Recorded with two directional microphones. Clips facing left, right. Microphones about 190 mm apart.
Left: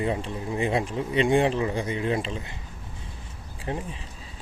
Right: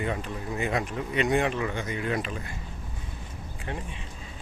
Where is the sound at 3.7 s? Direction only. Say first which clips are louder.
Left 5 dB; 30° left (ahead or behind).